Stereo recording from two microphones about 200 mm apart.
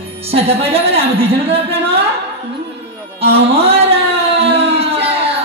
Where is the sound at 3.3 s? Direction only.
30° right (ahead or behind).